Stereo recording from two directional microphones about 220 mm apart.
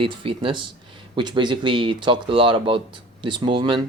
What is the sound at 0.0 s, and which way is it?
Speech, 25° right (ahead or behind).